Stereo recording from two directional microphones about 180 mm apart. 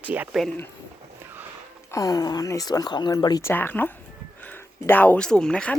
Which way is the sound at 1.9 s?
20° left (ahead or behind).